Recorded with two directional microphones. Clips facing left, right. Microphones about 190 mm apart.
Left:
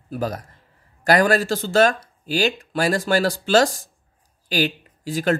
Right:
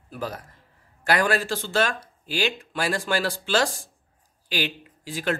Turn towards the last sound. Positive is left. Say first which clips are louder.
# left 6 dB
turn(degrees=40)  # may be behind; listen again after turning